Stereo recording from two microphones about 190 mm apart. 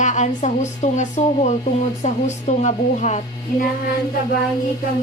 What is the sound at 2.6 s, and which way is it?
Speech, 35° left (ahead or behind).